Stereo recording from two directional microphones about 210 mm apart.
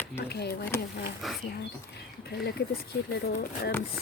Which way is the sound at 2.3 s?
50° left (ahead or behind).